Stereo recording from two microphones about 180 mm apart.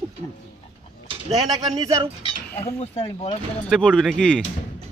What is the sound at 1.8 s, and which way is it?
Speech, 20° right (ahead or behind).